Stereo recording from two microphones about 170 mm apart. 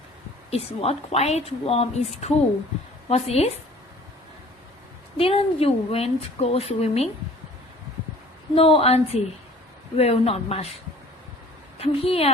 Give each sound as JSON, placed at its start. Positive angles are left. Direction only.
{"t": 0.5, "sound": "speech", "side_deg": 35}
{"t": 5.1, "sound": "speech", "side_deg": 35}
{"t": 8.5, "sound": "speech", "side_deg": 35}
{"t": 11.8, "sound": "speech", "side_deg": 35}